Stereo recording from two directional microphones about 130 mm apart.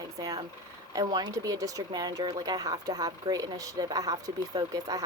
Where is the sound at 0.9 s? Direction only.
30° right (ahead or behind).